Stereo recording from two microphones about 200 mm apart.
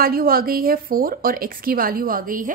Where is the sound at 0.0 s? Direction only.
50° right (ahead or behind).